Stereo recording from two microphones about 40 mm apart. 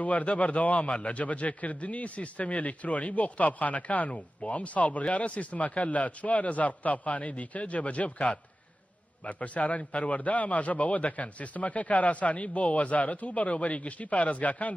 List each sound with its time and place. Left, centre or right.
0.0 s a man's voice: left